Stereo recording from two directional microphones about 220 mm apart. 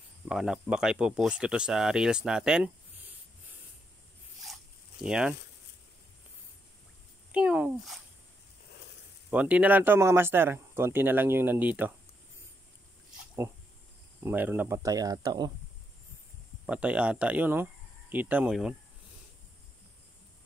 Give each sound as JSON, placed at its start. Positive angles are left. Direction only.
{"t": 0.3, "sound": "speech", "side_deg": -5}
{"t": 5.0, "sound": "speech", "side_deg": -5}
{"t": 7.3, "sound": "speech", "side_deg": -5}
{"t": 9.3, "sound": "speech", "side_deg": -5}
{"t": 14.2, "sound": "speech", "side_deg": -10}
{"t": 16.6, "sound": "speech", "side_deg": -5}